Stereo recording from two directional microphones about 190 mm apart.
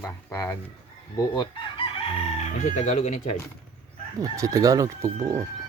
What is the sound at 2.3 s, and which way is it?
Speech, 35° left (ahead or behind).